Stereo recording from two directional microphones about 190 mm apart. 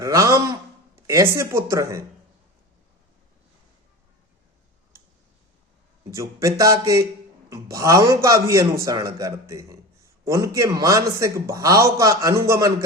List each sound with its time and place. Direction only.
0.0 s a man's voice: 15° right (ahead or behind)
6.1 s a man's voice: 15° right (ahead or behind)